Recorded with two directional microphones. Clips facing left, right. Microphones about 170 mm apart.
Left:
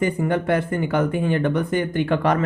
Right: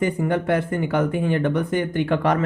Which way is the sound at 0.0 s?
20° right (ahead or behind).